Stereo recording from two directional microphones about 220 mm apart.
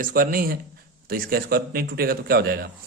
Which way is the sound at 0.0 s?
40° right (ahead or behind).